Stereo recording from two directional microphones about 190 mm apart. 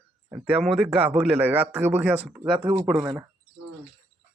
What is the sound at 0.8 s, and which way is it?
A man's voice, 5° right (ahead or behind).